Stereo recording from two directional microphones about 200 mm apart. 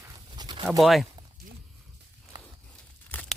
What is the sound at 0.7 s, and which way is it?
Speech, centre (ahead or behind).